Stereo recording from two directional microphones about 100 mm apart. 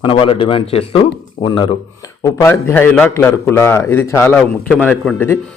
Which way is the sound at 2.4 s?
20° left (ahead or behind).